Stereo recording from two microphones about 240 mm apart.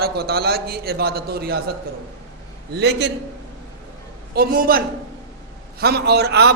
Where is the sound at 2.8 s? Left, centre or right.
Right.